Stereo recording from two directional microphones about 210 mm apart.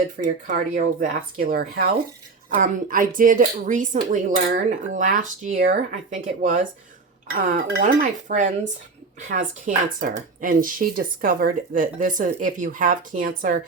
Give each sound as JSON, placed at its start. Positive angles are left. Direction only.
{"t": 0.2, "sound": "speech", "side_deg": -40}